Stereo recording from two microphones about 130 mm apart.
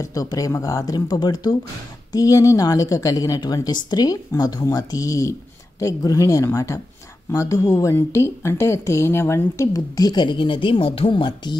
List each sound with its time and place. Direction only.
0.0 s a woman's voice: 25° left (ahead or behind)